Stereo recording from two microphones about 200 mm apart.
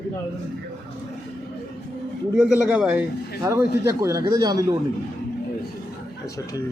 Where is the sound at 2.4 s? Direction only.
5° right (ahead or behind).